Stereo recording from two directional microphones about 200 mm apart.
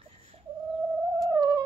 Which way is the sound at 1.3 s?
20° right (ahead or behind).